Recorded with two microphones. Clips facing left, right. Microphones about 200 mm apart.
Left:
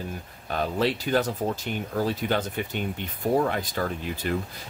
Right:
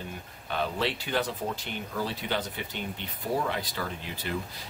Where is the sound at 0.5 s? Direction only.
40° left (ahead or behind).